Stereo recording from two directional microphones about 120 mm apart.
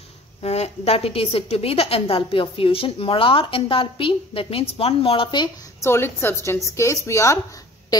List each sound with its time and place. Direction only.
0.4 s a woman's voice: 60° left (ahead or behind); by 5.5 s 45° left (ahead or behind)
5.8 s a woman's voice: 20° left (ahead or behind)
7.9 s a sound: 35° left (ahead or behind)